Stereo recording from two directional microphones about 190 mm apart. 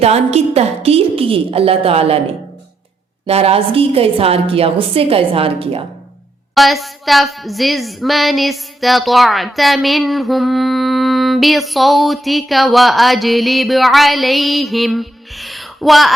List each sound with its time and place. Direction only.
0.0 s a woman's voice: 35° right (ahead or behind)
3.2 s a woman's voice: 30° right (ahead or behind)
6.5 s a sound: centre (ahead or behind)